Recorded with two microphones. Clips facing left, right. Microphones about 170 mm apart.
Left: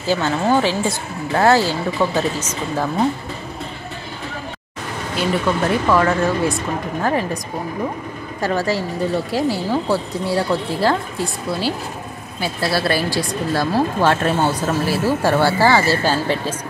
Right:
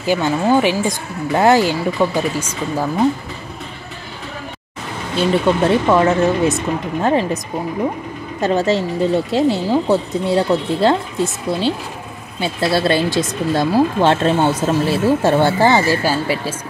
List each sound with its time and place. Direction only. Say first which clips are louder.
0.0 s speech: right 2 dB; 15° right (ahead or behind)
5.1 s speech: right 4 dB; 25° right (ahead or behind)
8.4 s speech: right 4 dB; 20° right (ahead or behind)